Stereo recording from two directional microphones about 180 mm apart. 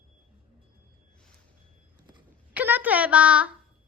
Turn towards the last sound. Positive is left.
turn(degrees=-5)  # may be behind; listen again after turning